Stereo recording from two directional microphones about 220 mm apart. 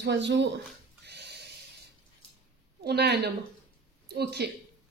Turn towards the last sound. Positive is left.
turn(degrees=-45)  # may be behind; listen again after turning